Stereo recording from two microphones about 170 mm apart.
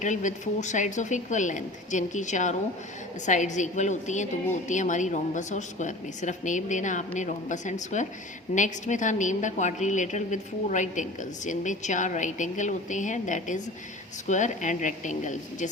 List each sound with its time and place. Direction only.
0.0 s a woman's voice: 45° left (ahead or behind)